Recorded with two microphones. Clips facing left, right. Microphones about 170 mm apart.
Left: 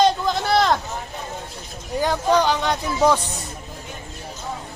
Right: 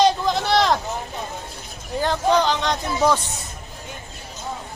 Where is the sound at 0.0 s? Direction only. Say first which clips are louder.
Even; centre (ahead or behind).